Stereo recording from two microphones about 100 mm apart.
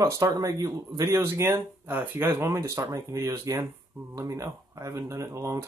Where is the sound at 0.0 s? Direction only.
35° right (ahead or behind).